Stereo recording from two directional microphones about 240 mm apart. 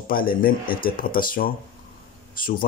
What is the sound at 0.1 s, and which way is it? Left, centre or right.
Speech, left.